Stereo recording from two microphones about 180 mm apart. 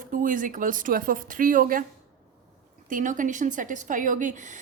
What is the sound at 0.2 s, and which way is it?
A woman's voice, 45° right (ahead or behind).